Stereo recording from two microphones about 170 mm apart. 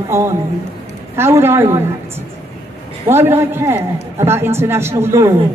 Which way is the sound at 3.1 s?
15° right (ahead or behind).